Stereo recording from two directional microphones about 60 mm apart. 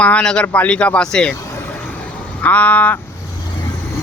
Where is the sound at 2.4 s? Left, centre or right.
Left.